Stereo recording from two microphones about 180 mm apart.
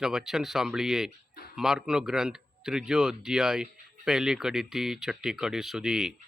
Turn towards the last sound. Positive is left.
turn(degrees=-5)  # may be behind; listen again after turning